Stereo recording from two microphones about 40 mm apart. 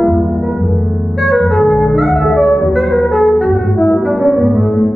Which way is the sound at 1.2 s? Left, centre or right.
Centre.